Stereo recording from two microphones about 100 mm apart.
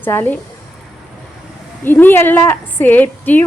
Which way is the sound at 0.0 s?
20° left (ahead or behind).